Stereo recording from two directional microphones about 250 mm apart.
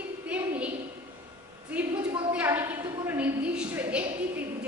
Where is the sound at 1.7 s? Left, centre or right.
Centre.